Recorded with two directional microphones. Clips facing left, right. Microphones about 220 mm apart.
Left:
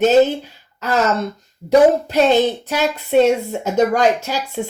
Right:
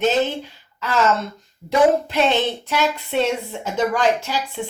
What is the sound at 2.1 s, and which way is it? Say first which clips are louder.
A woman's voice: left 5 dB; 40° left (ahead or behind).